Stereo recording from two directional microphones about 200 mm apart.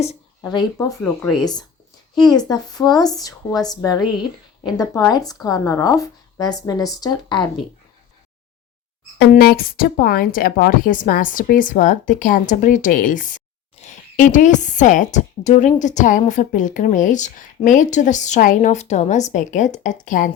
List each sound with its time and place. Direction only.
0.4 s speech: 20° left (ahead or behind)
9.3 s a woman's voice: 50° left (ahead or behind)